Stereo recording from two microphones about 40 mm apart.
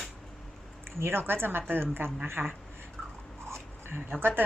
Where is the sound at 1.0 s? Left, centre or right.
Right.